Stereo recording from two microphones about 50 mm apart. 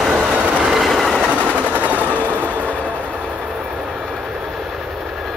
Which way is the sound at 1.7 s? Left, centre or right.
Right.